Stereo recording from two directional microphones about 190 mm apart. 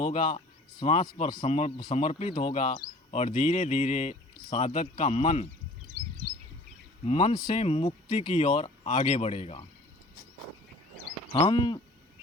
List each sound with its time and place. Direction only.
0.0 s a man's voice: 25° left (ahead or behind)
1.5 s speech: 35° left (ahead or behind)
4.4 s speech: 25° left (ahead or behind)
5.9 s chirp: 65° left (ahead or behind)
7.0 s speech: 35° left (ahead or behind)
11.3 s speech: 25° left (ahead or behind)